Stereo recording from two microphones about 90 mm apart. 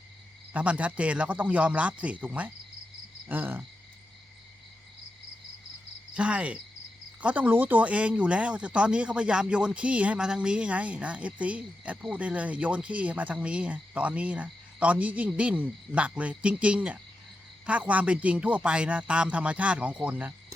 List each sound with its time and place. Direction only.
0.5 s speech: 15° right (ahead or behind)
3.2 s cricket: 20° right (ahead or behind)
6.1 s speech: 15° right (ahead or behind)